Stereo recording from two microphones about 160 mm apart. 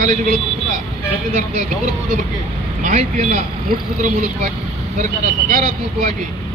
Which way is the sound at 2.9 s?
50° right (ahead or behind).